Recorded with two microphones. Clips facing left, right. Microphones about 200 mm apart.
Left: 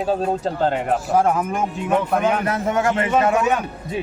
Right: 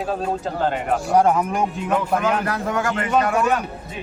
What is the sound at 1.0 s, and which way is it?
A man's voice, centre (ahead or behind).